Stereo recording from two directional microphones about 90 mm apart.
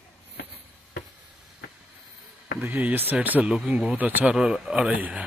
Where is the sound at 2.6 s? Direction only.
20° right (ahead or behind).